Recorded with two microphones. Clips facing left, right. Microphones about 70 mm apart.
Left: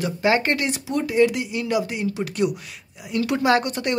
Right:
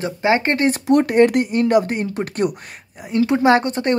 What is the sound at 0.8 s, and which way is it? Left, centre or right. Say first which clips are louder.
Speech: right 6 dB; right.